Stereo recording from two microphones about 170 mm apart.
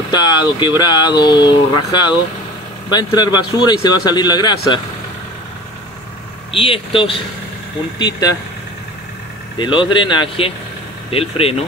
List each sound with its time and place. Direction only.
0.1 s speech: 25° left (ahead or behind)
6.5 s speech: 35° left (ahead or behind)
9.6 s speech: 30° left (ahead or behind)